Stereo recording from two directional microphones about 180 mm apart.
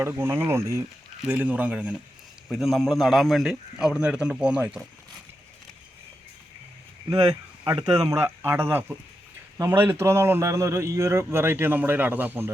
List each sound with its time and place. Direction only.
0.0 s a man's voice: 15° right (ahead or behind)
7.1 s a man's voice: 20° right (ahead or behind)